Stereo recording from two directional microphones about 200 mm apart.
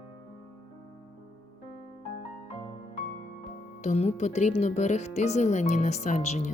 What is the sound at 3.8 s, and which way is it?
Speech, 35° left (ahead or behind).